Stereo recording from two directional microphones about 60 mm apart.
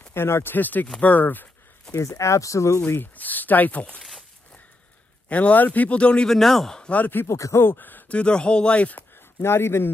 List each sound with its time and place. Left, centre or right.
0.1 s speech: left
1.9 s speech: left
3.2 s speech: left
5.3 s speech: left
6.2 s speech: centre
6.9 s speech: left
7.2 s speech: left
7.6 s speech: left
8.1 s speech: centre
9.1 s speech: left